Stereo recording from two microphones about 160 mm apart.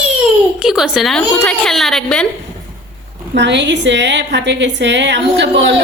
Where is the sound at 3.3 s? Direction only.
90° right.